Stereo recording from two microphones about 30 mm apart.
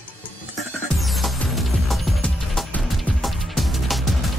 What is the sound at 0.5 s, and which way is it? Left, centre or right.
Music, centre.